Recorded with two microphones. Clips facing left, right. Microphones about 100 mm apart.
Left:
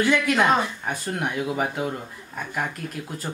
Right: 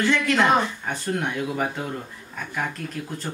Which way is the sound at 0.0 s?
10° left (ahead or behind).